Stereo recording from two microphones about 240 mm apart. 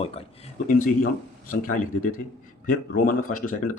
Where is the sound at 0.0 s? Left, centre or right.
Left.